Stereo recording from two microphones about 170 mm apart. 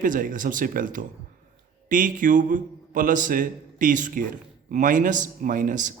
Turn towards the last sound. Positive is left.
turn(degrees=-50)  # may be behind; listen again after turning